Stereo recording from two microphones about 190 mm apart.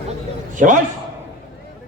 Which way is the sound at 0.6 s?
45° right (ahead or behind).